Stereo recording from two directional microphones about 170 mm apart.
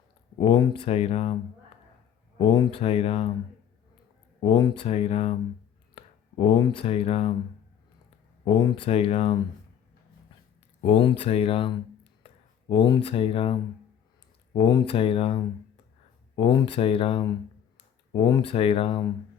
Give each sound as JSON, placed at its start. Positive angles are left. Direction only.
{"t": 0.3, "sound": "speech", "side_deg": 30}
{"t": 2.4, "sound": "speech", "side_deg": 30}
{"t": 4.4, "sound": "speech", "side_deg": 30}
{"t": 8.4, "sound": "speech", "side_deg": 30}
{"t": 10.8, "sound": "speech", "side_deg": 35}